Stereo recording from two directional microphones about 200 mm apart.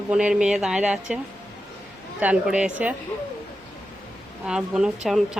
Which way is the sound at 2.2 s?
5° right (ahead or behind).